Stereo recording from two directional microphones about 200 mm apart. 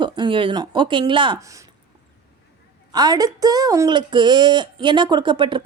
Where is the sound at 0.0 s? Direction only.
25° right (ahead or behind).